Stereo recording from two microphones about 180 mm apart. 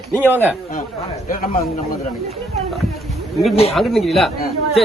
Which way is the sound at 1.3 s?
50° left (ahead or behind).